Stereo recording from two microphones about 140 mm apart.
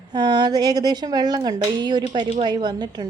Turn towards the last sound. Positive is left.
turn(degrees=-30)  # may be behind; listen again after turning